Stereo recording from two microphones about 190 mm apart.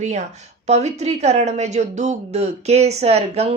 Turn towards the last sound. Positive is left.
turn(degrees=-35)  # may be behind; listen again after turning